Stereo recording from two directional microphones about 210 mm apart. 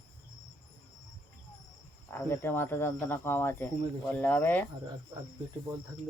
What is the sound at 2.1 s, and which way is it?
Speech, 10° left (ahead or behind).